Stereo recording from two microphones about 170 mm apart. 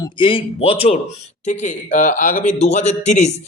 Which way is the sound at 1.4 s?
45° left (ahead or behind).